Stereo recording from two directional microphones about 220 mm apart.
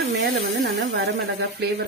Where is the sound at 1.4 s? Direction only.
45° right (ahead or behind).